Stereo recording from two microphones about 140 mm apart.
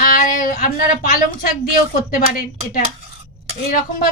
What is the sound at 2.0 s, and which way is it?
Speech, 85° left.